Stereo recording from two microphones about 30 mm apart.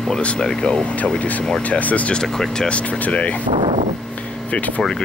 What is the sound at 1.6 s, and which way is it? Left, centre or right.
Speech, left.